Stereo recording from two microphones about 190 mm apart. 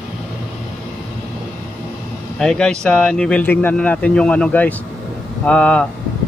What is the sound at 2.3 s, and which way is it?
Speech, 5° left (ahead or behind).